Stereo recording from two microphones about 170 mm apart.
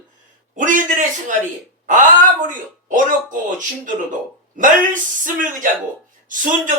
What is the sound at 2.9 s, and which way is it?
Speech, 50° right (ahead or behind).